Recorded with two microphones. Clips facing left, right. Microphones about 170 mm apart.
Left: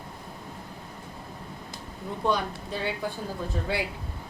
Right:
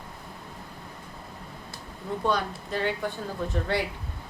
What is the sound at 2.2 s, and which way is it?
Speech, 10° left (ahead or behind).